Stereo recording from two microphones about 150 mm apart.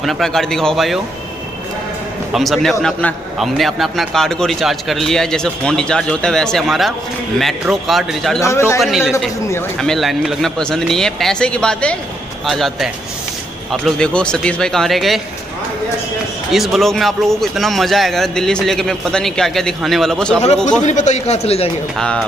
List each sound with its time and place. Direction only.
0.0 s a man's voice: centre (ahead or behind)
2.3 s a man's voice: centre (ahead or behind)
8.4 s speech: 20° left (ahead or behind)
8.8 s a man's voice: 5° right (ahead or behind)
16.5 s a man's voice: centre (ahead or behind)
20.8 s a man's voice: 50° left (ahead or behind)
21.9 s speech: 5° left (ahead or behind)